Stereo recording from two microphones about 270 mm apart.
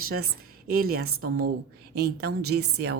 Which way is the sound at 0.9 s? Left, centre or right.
Right.